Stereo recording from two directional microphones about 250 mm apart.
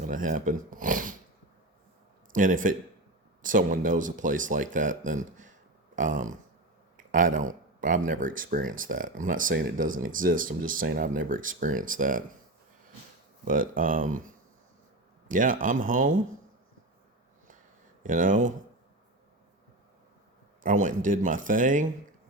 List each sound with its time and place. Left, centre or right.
0.0 s speech: right
2.3 s speech: right
13.4 s speech: right
18.0 s speech: right
20.7 s speech: right